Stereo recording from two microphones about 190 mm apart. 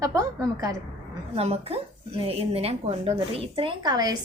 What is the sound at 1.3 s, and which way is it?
A woman's voice, 30° right (ahead or behind).